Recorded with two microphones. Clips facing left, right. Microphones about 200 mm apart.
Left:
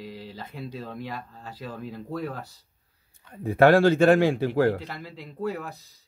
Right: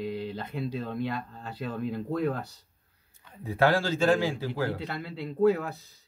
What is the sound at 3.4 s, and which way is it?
A man's voice, 55° left (ahead or behind).